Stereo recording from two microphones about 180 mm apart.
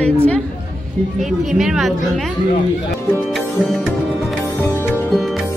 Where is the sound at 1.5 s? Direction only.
Centre (ahead or behind).